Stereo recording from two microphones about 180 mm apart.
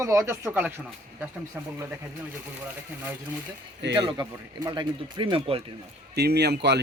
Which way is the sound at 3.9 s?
25° right (ahead or behind).